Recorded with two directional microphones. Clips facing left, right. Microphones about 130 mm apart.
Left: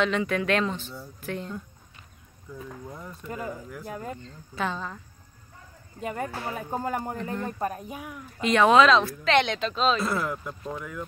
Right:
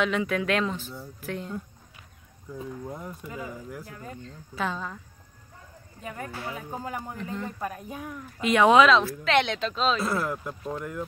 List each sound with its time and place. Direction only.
0.0 s speech: 5° right (ahead or behind)
2.6 s speech: 20° right (ahead or behind)
4.2 s speech: centre (ahead or behind)
5.9 s speech: 60° left (ahead or behind)
7.4 s speech: 45° left (ahead or behind)
7.9 s a woman's voice: 10° left (ahead or behind)
8.4 s speech: 10° right (ahead or behind)